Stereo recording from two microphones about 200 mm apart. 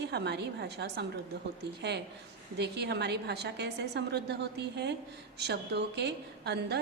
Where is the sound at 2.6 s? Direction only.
55° right (ahead or behind).